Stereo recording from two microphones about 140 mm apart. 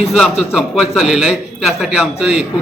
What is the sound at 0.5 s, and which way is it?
A man's voice, centre (ahead or behind).